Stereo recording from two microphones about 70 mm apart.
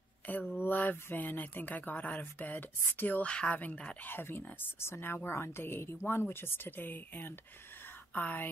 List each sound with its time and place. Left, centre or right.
0.3 s a woman's voice: left